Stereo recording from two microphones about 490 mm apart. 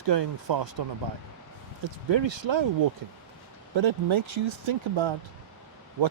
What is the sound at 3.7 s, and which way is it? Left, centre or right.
Speech, right.